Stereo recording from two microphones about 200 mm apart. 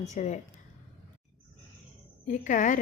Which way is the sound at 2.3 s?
40° left (ahead or behind).